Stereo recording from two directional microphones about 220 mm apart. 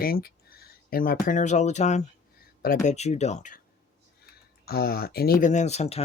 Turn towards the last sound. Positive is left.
turn(degrees=30)  # may be behind; listen again after turning